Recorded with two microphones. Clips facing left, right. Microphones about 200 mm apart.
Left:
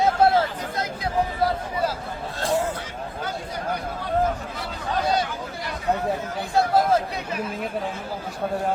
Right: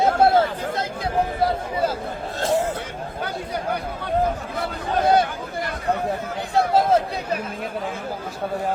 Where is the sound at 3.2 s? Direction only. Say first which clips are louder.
Right 3 dB; 60° right (ahead or behind).